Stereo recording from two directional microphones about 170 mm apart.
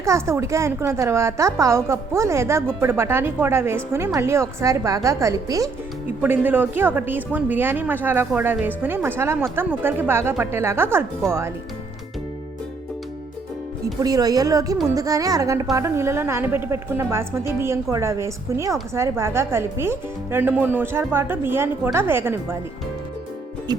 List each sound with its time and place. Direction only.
0.0 s a woman's voice: 15° right (ahead or behind)
14.0 s a woman's voice: 20° right (ahead or behind)